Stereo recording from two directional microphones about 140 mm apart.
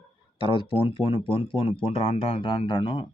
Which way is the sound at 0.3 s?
35° left (ahead or behind).